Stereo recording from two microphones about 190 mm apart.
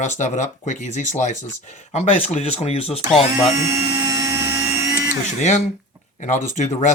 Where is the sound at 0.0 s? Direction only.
40° left (ahead or behind).